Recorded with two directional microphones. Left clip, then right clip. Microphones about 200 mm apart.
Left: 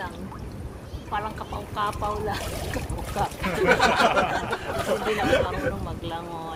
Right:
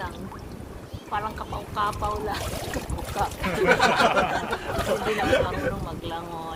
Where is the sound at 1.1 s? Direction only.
5° left (ahead or behind).